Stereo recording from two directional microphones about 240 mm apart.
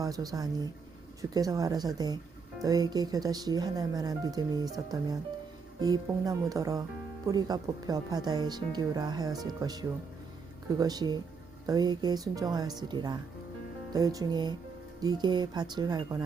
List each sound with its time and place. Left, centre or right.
0.0 s speech: centre